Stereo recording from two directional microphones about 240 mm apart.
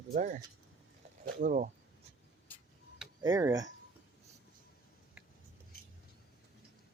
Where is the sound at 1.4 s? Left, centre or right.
Right.